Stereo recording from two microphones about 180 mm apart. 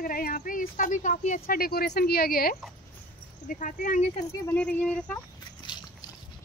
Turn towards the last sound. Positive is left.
turn(degrees=5)  # may be behind; listen again after turning